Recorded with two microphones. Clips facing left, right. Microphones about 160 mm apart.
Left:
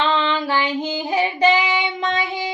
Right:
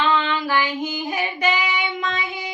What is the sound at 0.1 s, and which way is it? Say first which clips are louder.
Child singing: left 1 dB; 30° left (ahead or behind).